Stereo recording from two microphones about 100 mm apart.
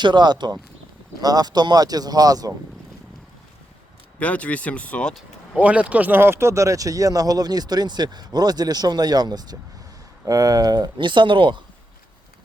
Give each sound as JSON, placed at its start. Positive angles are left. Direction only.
{"t": 0.0, "sound": "speech", "side_deg": -50}
{"t": 4.2, "sound": "speech", "side_deg": 15}
{"t": 5.5, "sound": "speech", "side_deg": -15}
{"t": 10.9, "sound": "speech", "side_deg": -50}